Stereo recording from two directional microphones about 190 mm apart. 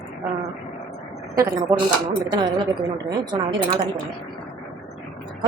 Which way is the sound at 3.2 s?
25° right (ahead or behind).